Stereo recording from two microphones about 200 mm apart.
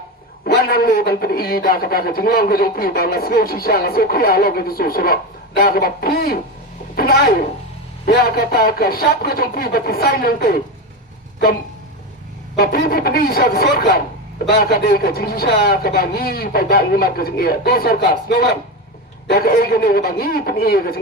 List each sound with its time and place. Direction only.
0.4 s a man's voice: 50° left (ahead or behind)
12.5 s a man's voice: 45° left (ahead or behind)